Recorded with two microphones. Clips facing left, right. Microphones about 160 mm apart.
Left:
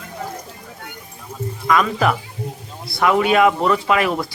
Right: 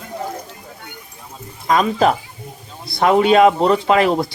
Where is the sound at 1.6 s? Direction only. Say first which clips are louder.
Right 2 dB; 25° right (ahead or behind).